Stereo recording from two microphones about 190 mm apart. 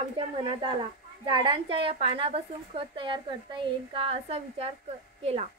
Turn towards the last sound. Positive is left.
turn(degrees=-35)  # may be behind; listen again after turning